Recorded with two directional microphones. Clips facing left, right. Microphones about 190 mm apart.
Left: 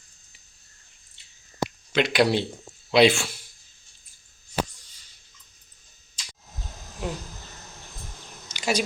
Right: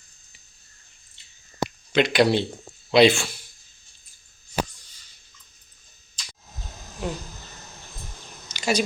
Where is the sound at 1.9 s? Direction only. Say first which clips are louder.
Right 2 dB; 5° left (ahead or behind).